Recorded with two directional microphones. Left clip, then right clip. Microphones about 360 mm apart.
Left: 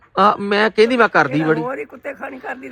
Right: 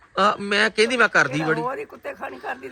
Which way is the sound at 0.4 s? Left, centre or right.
Centre.